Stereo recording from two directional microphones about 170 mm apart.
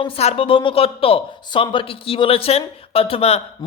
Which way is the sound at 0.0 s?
35° left (ahead or behind).